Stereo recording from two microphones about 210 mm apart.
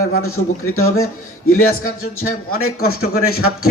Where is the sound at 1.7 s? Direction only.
40° left (ahead or behind).